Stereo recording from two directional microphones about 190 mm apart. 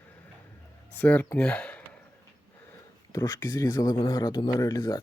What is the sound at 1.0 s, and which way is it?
Speech, 10° left (ahead or behind).